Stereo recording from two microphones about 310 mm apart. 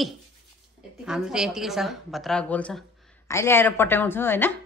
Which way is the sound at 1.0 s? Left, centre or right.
Centre.